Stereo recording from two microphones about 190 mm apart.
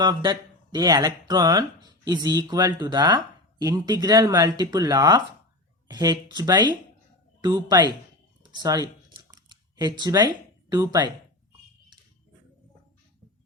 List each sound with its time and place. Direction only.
0.0 s speech: 20° right (ahead or behind)
8.4 s computer keyboard: 20° right (ahead or behind)